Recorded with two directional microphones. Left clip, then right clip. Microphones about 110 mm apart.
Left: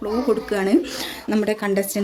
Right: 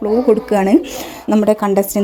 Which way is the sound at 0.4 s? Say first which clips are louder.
Right 7 dB; 60° right (ahead or behind).